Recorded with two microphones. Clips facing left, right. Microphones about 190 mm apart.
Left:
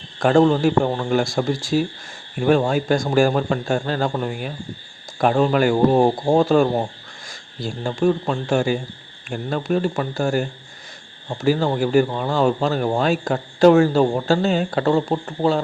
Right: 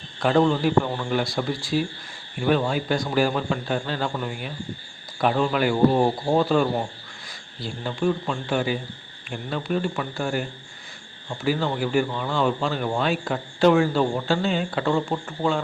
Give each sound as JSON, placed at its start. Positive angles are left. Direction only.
{"t": 0.2, "sound": "a man's voice", "side_deg": 45}